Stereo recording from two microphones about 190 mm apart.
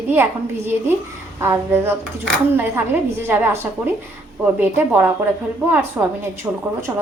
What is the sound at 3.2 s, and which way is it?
A woman's voice, 10° right (ahead or behind).